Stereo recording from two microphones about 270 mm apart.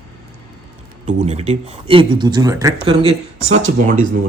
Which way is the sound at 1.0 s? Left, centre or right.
Right.